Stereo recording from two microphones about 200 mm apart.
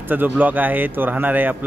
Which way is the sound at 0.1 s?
10° right (ahead or behind).